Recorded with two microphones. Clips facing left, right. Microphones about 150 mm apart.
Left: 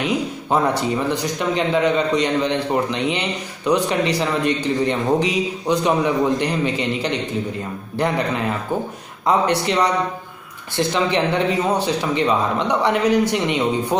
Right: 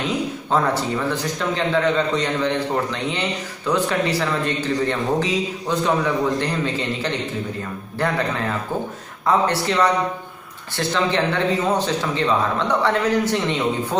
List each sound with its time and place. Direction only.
0.0 s a man's voice: 15° left (ahead or behind)